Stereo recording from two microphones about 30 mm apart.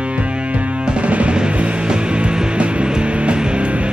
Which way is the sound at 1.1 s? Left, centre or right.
Right.